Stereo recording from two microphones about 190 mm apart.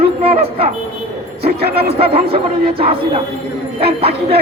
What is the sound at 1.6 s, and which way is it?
Speech, 55° right (ahead or behind).